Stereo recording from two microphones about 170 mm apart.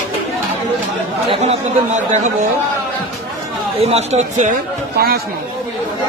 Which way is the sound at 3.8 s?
40° right (ahead or behind).